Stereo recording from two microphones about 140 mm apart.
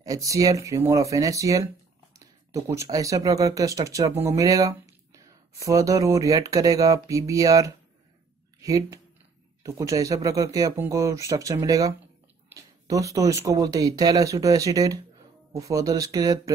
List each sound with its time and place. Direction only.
0.0 s speech: 25° right (ahead or behind)